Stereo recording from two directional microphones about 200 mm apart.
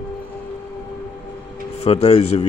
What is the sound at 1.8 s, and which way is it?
Speech, 30° left (ahead or behind).